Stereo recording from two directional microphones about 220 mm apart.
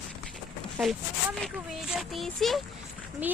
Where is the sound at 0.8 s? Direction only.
Centre (ahead or behind).